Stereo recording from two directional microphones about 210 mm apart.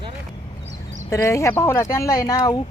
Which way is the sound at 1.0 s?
15° left (ahead or behind).